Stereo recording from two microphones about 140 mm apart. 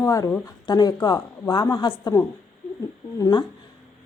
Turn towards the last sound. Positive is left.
turn(degrees=30)  # may be behind; listen again after turning